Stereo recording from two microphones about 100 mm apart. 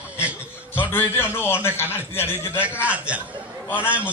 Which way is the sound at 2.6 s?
15° right (ahead or behind).